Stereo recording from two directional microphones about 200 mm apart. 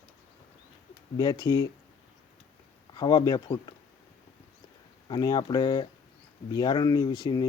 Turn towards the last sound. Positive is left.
turn(degrees=20)  # may be behind; listen again after turning